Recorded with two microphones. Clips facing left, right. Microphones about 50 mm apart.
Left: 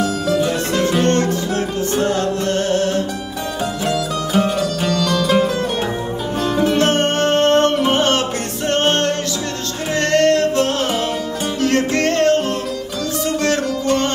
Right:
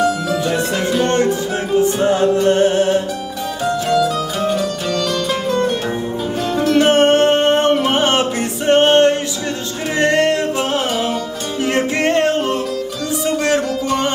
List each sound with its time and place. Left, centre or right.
0.5 s music: centre
3.8 s music: centre
6.5 s music: centre
6.8 s music: centre